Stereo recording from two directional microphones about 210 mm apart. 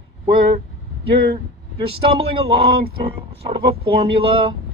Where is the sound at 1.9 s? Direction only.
25° right (ahead or behind).